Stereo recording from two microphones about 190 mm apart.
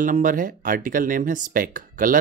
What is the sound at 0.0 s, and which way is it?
Speech, 45° right (ahead or behind).